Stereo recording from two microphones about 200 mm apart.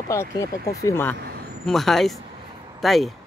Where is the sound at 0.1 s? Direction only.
15° left (ahead or behind).